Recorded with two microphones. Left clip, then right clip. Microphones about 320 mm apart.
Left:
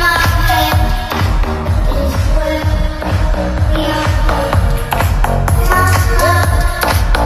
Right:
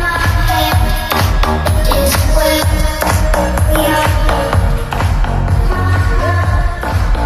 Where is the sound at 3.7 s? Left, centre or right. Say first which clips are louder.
Right 4 dB; centre.